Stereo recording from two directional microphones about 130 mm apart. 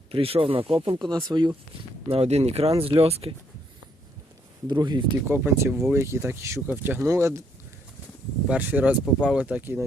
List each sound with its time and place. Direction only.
0.1 s speech: 45° right (ahead or behind)
2.0 s speech: 50° right (ahead or behind)
4.7 s speech: 35° right (ahead or behind)
5.3 s speech: 15° right (ahead or behind)
8.4 s speech: 10° right (ahead or behind)